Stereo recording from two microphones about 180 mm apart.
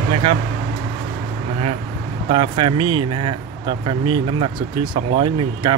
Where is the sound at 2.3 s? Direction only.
30° right (ahead or behind).